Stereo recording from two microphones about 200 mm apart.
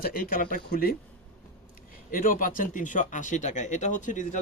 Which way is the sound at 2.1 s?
45° left (ahead or behind).